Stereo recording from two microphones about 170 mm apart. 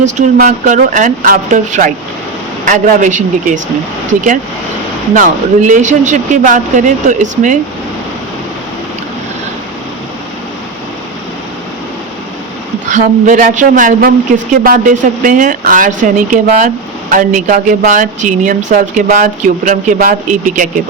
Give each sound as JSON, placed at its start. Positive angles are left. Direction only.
{"t": 0.0, "sound": "speech", "side_deg": -50}
{"t": 5.1, "sound": "speech", "side_deg": -50}
{"t": 12.9, "sound": "speech", "side_deg": -45}